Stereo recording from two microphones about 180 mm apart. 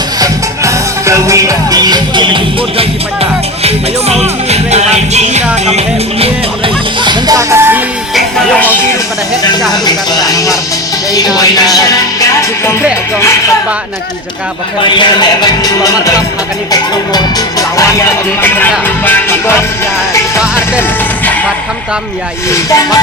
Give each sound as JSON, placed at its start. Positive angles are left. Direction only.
{"t": 0.2, "sound": "music", "side_deg": -15}
{"t": 4.1, "sound": "music", "side_deg": -35}
{"t": 7.0, "sound": "music", "side_deg": -20}
{"t": 8.1, "sound": "music", "side_deg": 5}
{"t": 9.8, "sound": "a sound", "side_deg": 20}
{"t": 11.1, "sound": "music", "side_deg": 20}
{"t": 14.9, "sound": "music", "side_deg": 25}
{"t": 22.5, "sound": "music", "side_deg": 20}